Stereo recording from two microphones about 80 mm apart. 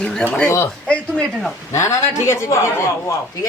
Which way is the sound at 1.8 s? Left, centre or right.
Left.